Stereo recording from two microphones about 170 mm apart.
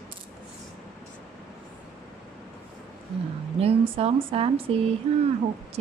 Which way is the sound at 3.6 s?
35° right (ahead or behind).